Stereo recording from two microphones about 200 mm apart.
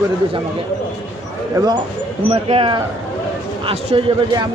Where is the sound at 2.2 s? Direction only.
30° right (ahead or behind).